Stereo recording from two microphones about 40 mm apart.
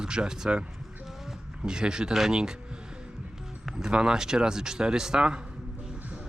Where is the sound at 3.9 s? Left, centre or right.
Right.